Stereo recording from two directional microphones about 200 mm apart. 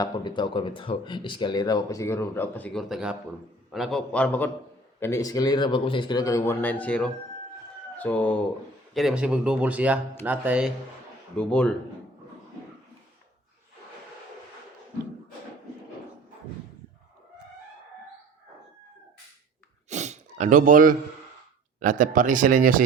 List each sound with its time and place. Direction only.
0.0 s speech: 20° left (ahead or behind); by 10.7 s 5° right (ahead or behind)
11.3 s speech: 5° left (ahead or behind)
19.9 s sneeze: 35° right (ahead or behind)
21.8 s speech: 40° right (ahead or behind)